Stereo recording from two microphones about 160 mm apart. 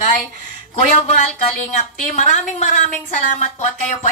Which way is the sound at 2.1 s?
50° left (ahead or behind).